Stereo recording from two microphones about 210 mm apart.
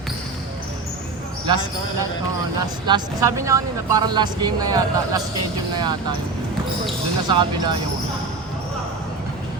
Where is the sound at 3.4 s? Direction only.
15° right (ahead or behind).